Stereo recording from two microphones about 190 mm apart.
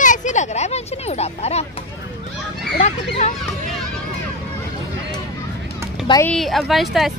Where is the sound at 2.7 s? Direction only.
35° left (ahead or behind).